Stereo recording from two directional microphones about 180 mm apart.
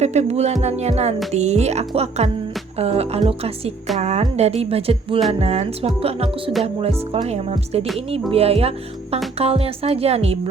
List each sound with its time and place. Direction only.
0.0 s speech: 40° right (ahead or behind)